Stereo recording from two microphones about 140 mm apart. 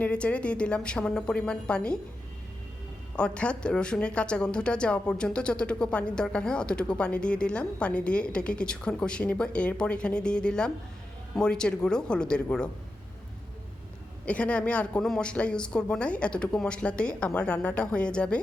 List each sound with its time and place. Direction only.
0.0 s speech: 10° left (ahead or behind)
3.2 s speech: 5° left (ahead or behind)
14.3 s speech: 10° left (ahead or behind)